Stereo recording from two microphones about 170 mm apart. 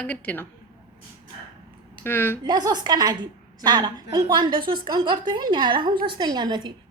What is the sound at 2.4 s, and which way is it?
A woman's voice, 25° right (ahead or behind).